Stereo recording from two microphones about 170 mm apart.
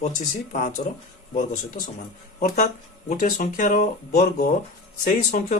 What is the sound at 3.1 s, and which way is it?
Speech, 50° left (ahead or behind).